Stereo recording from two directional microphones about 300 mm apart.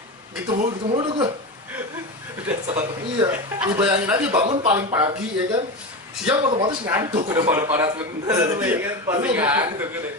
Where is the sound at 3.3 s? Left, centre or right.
Centre.